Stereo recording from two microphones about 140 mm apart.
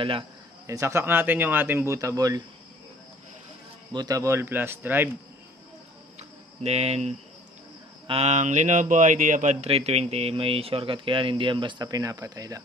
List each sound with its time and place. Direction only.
0.7 s speech: 20° right (ahead or behind)
3.9 s speech: 25° right (ahead or behind)
6.1 s a sound: 50° right (ahead or behind)
8.1 s speech: 50° right (ahead or behind); by 12.6 s 25° right (ahead or behind)